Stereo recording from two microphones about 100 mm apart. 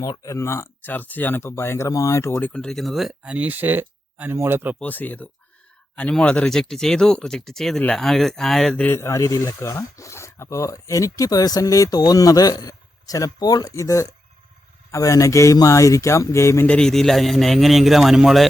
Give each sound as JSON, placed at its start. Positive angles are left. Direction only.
{"t": 0.0, "sound": "speech", "side_deg": 35}
{"t": 2.4, "sound": "speech", "side_deg": 10}
{"t": 3.3, "sound": "speech", "side_deg": -15}
{"t": 4.8, "sound": "speech", "side_deg": 15}
{"t": 8.9, "sound": "speech", "side_deg": 30}
{"t": 16.6, "sound": "speech", "side_deg": 5}